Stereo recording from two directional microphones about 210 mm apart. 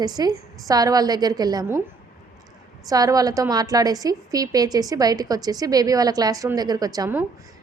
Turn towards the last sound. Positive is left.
turn(degrees=-15)  # may be behind; listen again after turning